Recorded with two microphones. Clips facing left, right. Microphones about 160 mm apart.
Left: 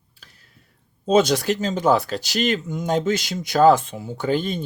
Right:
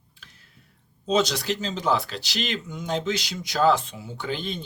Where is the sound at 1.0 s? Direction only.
50° left (ahead or behind).